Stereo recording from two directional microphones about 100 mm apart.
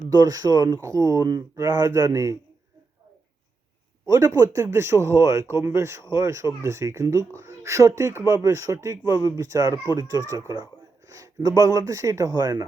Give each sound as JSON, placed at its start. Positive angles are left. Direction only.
{"t": 0.1, "sound": "speech", "side_deg": -40}
{"t": 4.0, "sound": "a man's voice", "side_deg": -30}